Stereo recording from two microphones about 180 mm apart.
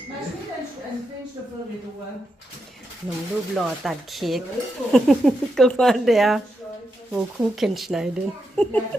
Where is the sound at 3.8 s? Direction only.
Centre (ahead or behind).